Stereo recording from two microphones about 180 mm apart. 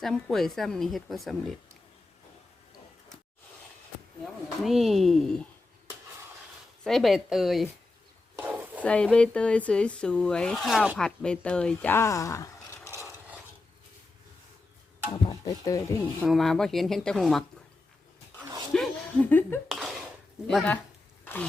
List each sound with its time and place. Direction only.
0.0 s speech: centre (ahead or behind)
4.6 s speech: centre (ahead or behind)
6.8 s speech: centre (ahead or behind)
8.4 s stir: 10° right (ahead or behind)
8.8 s speech: 5° left (ahead or behind)
15.1 s speech: 20° left (ahead or behind)
16.2 s speech: centre (ahead or behind)
18.7 s laughter: 5° left (ahead or behind)
19.7 s a sound: centre (ahead or behind)
20.5 s speech: centre (ahead or behind)